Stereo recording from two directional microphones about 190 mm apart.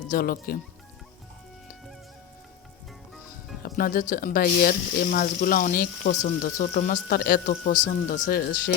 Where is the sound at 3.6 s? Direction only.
45° left (ahead or behind).